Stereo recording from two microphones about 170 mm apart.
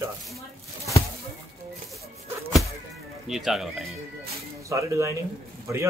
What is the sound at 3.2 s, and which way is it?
Speech, centre (ahead or behind).